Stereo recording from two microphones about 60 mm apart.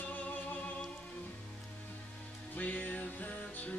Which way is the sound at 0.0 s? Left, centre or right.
Left.